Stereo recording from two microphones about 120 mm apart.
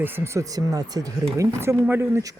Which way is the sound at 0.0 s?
20° right (ahead or behind).